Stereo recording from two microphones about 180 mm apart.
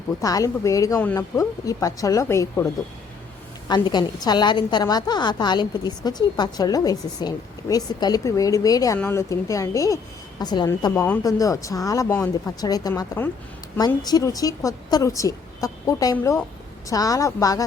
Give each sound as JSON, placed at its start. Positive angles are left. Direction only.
{"t": 0.2, "sound": "a woman's voice", "side_deg": 20}
{"t": 3.7, "sound": "a woman's voice", "side_deg": 25}